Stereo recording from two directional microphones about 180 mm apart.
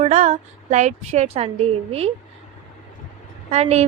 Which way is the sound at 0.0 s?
35° right (ahead or behind).